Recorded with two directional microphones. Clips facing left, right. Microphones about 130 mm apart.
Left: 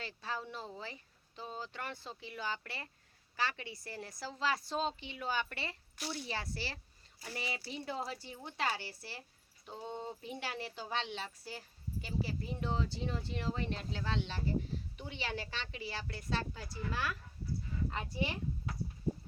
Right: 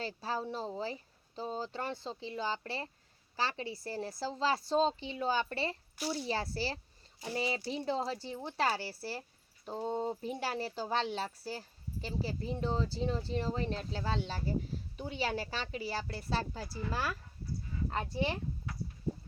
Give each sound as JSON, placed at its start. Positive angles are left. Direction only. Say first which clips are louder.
{"t": 0.0, "sound": "speech", "louder": "right 5 dB", "side_deg": -35}